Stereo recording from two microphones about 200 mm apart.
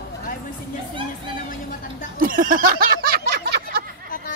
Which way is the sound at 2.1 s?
45° right (ahead or behind).